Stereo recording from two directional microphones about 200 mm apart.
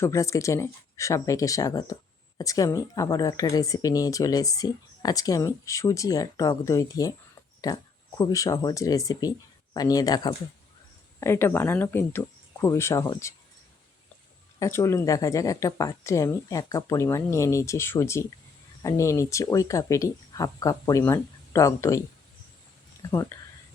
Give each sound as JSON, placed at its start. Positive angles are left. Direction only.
{"t": 0.0, "sound": "speech", "side_deg": 15}
{"t": 14.6, "sound": "speech", "side_deg": 15}
{"t": 23.0, "sound": "speech", "side_deg": 15}